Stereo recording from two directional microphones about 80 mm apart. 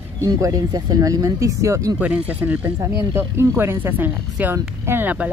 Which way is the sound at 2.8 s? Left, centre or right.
Right.